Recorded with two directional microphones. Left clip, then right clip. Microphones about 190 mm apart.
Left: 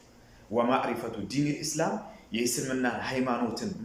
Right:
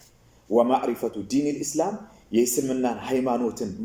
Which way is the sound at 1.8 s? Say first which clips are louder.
Right 3 dB; 35° right (ahead or behind).